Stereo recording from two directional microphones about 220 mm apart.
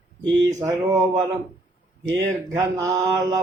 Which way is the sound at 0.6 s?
20° right (ahead or behind).